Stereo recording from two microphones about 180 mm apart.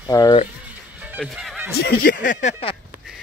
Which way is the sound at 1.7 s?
60° left (ahead or behind).